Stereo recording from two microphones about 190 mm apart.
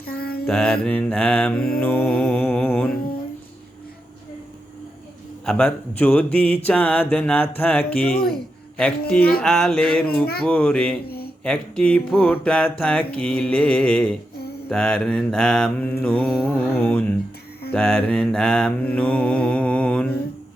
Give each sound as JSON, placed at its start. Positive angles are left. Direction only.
{"t": 0.0, "sound": "mantra", "side_deg": 55}
{"t": 0.4, "sound": "mantra", "side_deg": 5}
{"t": 1.8, "sound": "speech", "side_deg": 5}
{"t": 5.5, "sound": "speech", "side_deg": 10}
{"t": 9.4, "sound": "mantra", "side_deg": 0}
{"t": 11.0, "sound": "a sound", "side_deg": 55}
{"t": 11.4, "sound": "speech", "side_deg": 5}
{"t": 12.8, "sound": "mantra", "side_deg": 5}
{"t": 16.5, "sound": "speech", "side_deg": 10}
{"t": 17.7, "sound": "mantra", "side_deg": 10}